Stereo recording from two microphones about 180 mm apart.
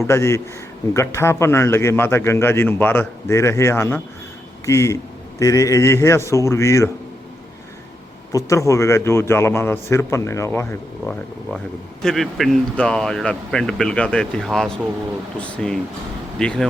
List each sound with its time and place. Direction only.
0.1 s a man's voice: 15° left (ahead or behind)
8.3 s a man's voice: 20° left (ahead or behind)